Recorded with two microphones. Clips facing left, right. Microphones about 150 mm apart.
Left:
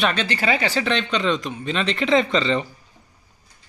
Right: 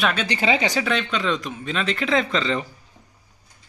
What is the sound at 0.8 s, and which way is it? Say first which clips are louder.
Speech: left 1 dB; 5° right (ahead or behind).